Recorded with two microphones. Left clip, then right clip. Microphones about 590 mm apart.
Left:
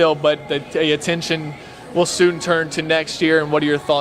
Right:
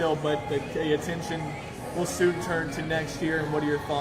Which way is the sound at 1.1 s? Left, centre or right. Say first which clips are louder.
Left 11 dB; left.